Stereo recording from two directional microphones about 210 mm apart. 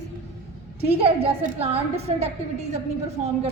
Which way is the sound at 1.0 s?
30° right (ahead or behind).